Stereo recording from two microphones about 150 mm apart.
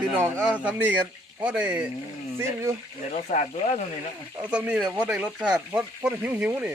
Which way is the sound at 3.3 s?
55° left (ahead or behind).